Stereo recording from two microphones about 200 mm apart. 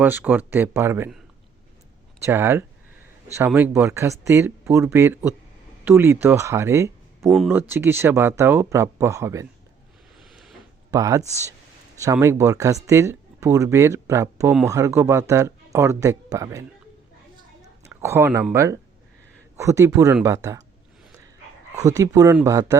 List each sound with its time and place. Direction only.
0.0 s speech: 10° right (ahead or behind)
2.1 s speech: 15° right (ahead or behind)
7.3 s speech: centre (ahead or behind)
7.5 s speech: 10° right (ahead or behind)
10.2 s a sound: centre (ahead or behind)
10.9 s speech: 15° right (ahead or behind)
21.8 s speech: 15° right (ahead or behind)